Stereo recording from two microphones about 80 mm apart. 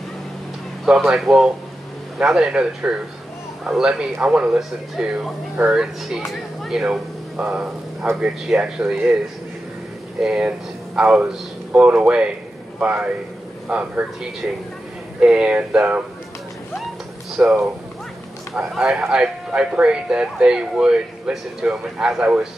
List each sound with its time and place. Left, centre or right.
0.8 s speech: centre
10.2 s a man's voice: centre
15.1 s speech: centre
17.4 s speech: centre
18.5 s speech: centre